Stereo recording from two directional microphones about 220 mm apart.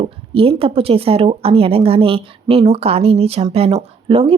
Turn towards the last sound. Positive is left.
turn(degrees=-25)  # may be behind; listen again after turning